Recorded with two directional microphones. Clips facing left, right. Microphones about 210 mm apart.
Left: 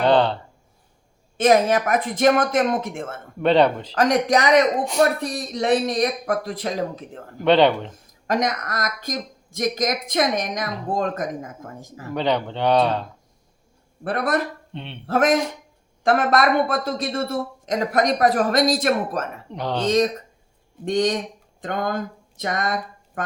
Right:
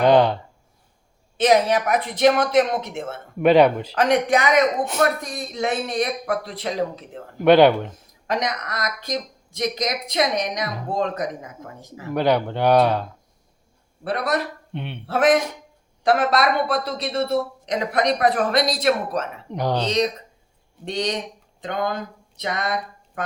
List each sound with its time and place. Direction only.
0.0 s speech: 15° right (ahead or behind)
1.4 s a woman's voice: 50° left (ahead or behind)
3.4 s speech: 10° right (ahead or behind)
3.9 s a man's voice: 40° left (ahead or behind)
7.4 s speech: 10° right (ahead or behind)
8.3 s a woman's voice: 45° left (ahead or behind)
12.1 s speech: 10° right (ahead or behind)
14.0 s a woman's voice: 50° left (ahead or behind)
14.7 s speech: 5° right (ahead or behind)
15.0 s a woman's voice: 45° left (ahead or behind)
19.5 s speech: 10° right (ahead or behind)
19.8 s a woman's voice: 50° left (ahead or behind)